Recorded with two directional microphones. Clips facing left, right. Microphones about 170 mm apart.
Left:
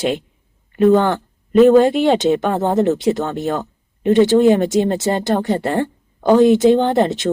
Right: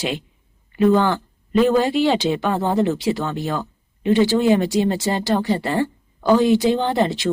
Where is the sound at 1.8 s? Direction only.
50° left (ahead or behind).